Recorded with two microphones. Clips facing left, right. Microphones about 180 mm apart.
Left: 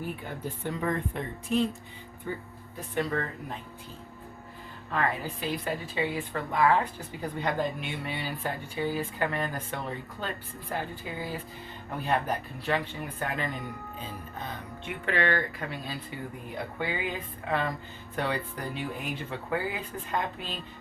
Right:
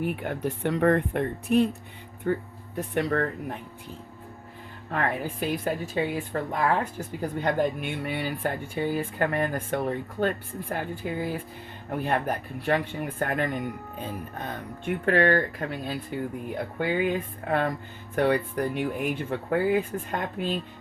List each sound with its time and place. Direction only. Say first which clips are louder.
0.0 s speech: right 7 dB; 70° right (ahead or behind)
4.9 s a woman's voice: right 2 dB; 55° right (ahead or behind)